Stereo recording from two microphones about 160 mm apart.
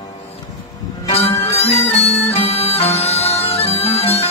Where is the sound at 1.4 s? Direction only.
40° left (ahead or behind).